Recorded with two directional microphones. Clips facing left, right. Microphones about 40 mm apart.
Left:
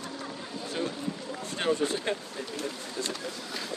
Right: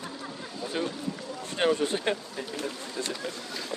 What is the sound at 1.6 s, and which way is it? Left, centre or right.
Speech, right.